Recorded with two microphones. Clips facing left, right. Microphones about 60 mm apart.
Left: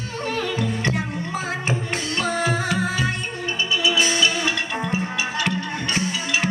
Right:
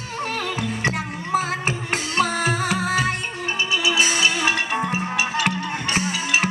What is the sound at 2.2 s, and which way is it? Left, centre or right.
Music, left.